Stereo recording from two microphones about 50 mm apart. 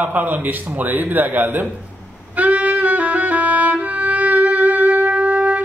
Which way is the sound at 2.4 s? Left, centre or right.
Right.